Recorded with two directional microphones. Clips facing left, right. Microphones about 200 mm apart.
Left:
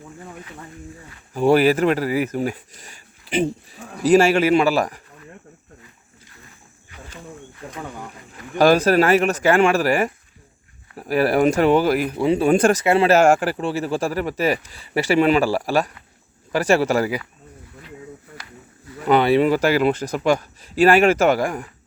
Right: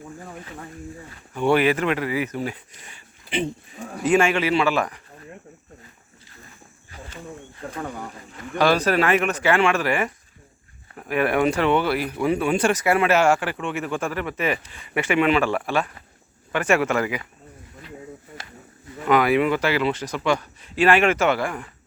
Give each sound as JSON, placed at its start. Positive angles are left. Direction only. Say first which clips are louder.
{"t": 1.3, "sound": "speech", "louder": "left 4 dB", "side_deg": 35}
{"t": 8.5, "sound": "speech", "louder": "left 5 dB", "side_deg": 45}
{"t": 12.1, "sound": "speech", "louder": "left 3 dB", "side_deg": 25}
{"t": 12.5, "sound": "speech", "louder": "left 7 dB", "side_deg": 45}
{"t": 12.8, "sound": "speech", "louder": "left 3 dB", "side_deg": 25}
{"t": 13.1, "sound": "speech", "louder": "left 4 dB", "side_deg": 45}
{"t": 19.0, "sound": "speech", "louder": "left 3 dB", "side_deg": 30}